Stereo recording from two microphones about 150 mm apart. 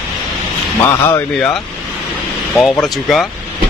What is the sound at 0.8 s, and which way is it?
Speech, 15° left (ahead or behind).